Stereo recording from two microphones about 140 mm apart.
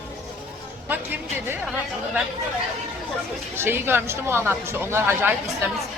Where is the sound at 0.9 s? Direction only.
15° right (ahead or behind).